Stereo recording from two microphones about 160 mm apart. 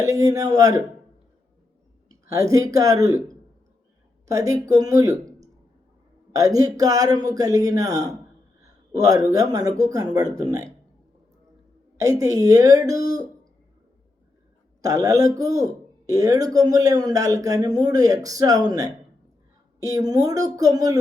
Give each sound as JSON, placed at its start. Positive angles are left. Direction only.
{"t": 0.0, "sound": "speech", "side_deg": -20}
{"t": 2.3, "sound": "speech", "side_deg": -20}
{"t": 4.3, "sound": "speech", "side_deg": -20}
{"t": 6.3, "sound": "speech", "side_deg": -20}
{"t": 11.9, "sound": "speech", "side_deg": -20}
{"t": 14.8, "sound": "speech", "side_deg": -20}